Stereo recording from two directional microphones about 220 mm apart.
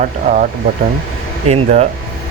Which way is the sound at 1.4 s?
30° right (ahead or behind).